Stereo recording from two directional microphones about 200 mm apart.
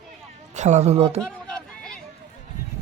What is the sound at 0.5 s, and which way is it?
Speech, 35° right (ahead or behind).